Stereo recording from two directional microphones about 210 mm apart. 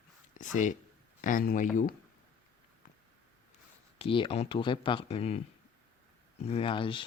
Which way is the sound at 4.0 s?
25° left (ahead or behind).